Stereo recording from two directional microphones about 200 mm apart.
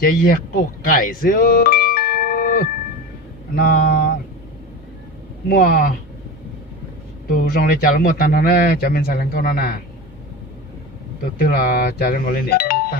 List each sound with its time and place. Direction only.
0.0 s a man's voice: 45° left (ahead or behind)
5.5 s a man's voice: 45° left (ahead or behind)
7.3 s a man's voice: 50° left (ahead or behind)
11.3 s a man's voice: 50° left (ahead or behind)